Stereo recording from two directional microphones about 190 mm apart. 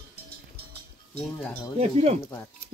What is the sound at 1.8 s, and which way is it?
Speech, 35° right (ahead or behind).